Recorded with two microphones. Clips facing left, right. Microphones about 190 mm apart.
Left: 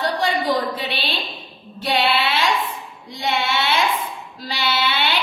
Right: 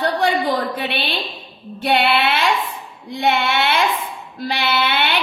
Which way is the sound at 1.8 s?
65° right (ahead or behind).